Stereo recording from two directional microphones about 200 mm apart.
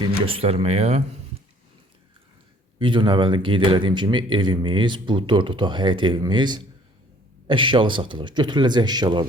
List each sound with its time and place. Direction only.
0.0 s speech: 25° right (ahead or behind)
2.7 s speech: 25° right (ahead or behind)